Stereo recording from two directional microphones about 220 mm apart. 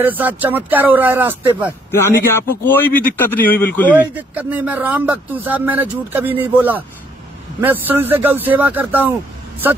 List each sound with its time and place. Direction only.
0.0 s speech: 10° right (ahead or behind)
1.9 s a man's voice: 10° left (ahead or behind)
3.9 s speech: 5° right (ahead or behind)